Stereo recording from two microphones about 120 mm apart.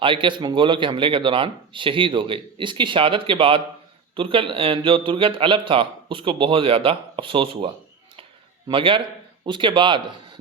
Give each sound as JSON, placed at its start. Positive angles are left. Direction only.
{"t": 0.0, "sound": "a man's voice", "side_deg": -45}